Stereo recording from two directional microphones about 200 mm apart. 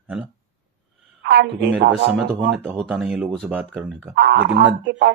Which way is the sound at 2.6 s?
Centre (ahead or behind).